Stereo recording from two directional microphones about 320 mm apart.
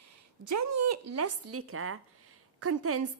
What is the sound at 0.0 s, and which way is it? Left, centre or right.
Speech, right.